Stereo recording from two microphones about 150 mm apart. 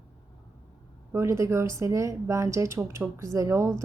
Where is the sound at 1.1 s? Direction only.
15° right (ahead or behind).